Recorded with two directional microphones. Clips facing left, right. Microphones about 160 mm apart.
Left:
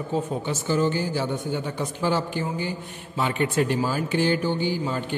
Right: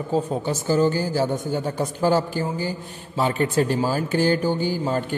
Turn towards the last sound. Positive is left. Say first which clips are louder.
# right 3 dB
turn(degrees=-45)  # may be behind; listen again after turning